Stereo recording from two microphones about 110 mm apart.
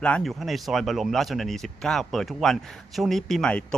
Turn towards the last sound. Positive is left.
turn(degrees=5)  # may be behind; listen again after turning